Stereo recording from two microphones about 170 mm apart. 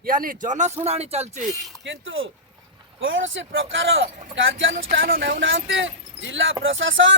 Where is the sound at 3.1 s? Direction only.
90° right.